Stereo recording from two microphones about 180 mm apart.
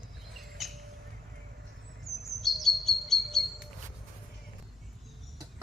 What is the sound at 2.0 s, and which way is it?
Chirp, centre (ahead or behind).